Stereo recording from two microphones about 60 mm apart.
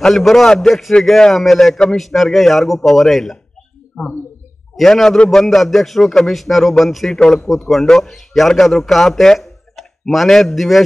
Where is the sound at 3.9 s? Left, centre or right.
Left.